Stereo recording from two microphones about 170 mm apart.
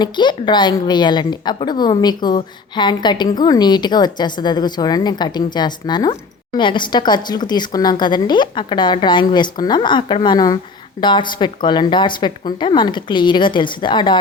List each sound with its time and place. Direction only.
0.0 s a woman's voice: 25° left (ahead or behind)